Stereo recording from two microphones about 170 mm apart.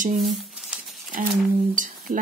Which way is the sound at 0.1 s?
Centre (ahead or behind).